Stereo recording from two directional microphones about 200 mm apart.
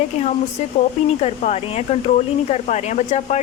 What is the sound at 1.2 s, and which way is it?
Speech, 35° left (ahead or behind).